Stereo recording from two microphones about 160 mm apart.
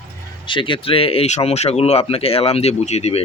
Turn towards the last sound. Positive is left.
turn(degrees=45)  # may be behind; listen again after turning